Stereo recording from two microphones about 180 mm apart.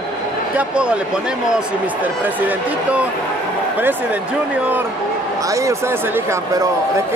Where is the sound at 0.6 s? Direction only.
5° right (ahead or behind).